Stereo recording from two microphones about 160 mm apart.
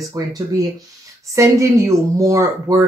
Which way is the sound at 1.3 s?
20° right (ahead or behind).